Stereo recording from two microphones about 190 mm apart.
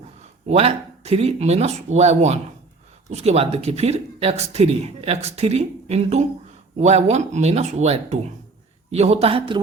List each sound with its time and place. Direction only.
0.4 s speech: 35° right (ahead or behind)